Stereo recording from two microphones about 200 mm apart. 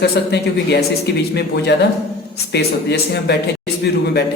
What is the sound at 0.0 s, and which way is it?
A man's voice, 55° left (ahead or behind).